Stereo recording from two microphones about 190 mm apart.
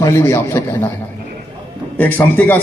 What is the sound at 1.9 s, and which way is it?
Speech, 10° left (ahead or behind).